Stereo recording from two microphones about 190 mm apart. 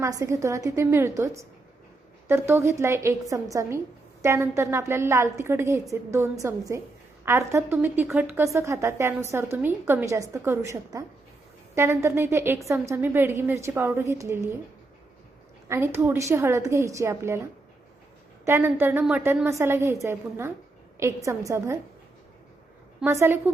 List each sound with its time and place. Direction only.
0.0 s a woman's voice: 15° right (ahead or behind)
15.7 s a woman's voice: 15° right (ahead or behind)
18.4 s a woman's voice: 15° right (ahead or behind)
23.0 s a woman's voice: 15° right (ahead or behind)